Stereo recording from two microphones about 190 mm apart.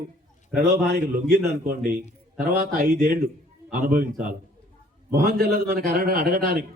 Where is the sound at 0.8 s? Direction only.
50° right (ahead or behind).